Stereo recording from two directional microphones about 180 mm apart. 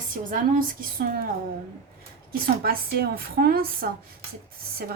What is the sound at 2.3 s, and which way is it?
A woman's voice, 55° right (ahead or behind).